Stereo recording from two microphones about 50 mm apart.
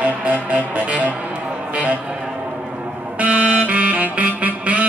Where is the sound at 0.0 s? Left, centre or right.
Right.